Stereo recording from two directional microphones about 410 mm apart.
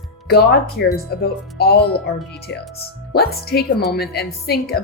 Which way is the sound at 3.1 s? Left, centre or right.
Left.